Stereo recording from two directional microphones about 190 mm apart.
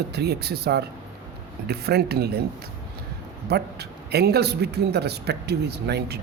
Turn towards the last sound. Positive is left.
turn(degrees=-60)  # may be behind; listen again after turning